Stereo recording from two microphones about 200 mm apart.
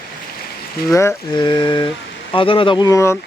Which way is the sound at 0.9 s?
20° left (ahead or behind).